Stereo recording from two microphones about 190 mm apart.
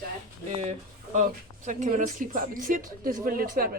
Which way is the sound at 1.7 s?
40° right (ahead or behind).